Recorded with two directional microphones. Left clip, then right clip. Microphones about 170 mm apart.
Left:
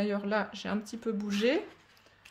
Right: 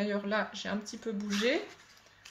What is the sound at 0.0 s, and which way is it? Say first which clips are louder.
Speech: left 1 dB; 45° left (ahead or behind).